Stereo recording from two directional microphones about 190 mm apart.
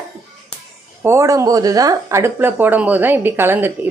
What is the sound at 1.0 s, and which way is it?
Speech, 15° right (ahead or behind).